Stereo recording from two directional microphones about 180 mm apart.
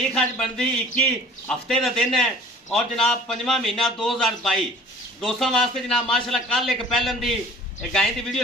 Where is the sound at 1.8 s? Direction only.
Centre (ahead or behind).